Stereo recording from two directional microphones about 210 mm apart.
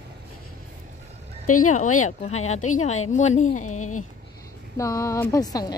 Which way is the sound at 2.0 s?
30° left (ahead or behind).